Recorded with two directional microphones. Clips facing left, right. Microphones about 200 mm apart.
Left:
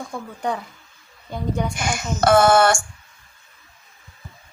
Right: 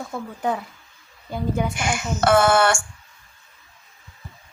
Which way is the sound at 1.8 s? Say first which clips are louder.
Even; 40° left (ahead or behind).